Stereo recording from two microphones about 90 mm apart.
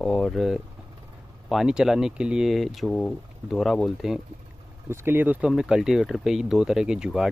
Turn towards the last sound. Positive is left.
turn(degrees=-5)  # may be behind; listen again after turning